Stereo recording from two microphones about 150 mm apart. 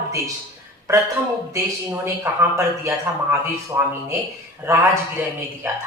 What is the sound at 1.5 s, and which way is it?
A man's voice, 20° right (ahead or behind).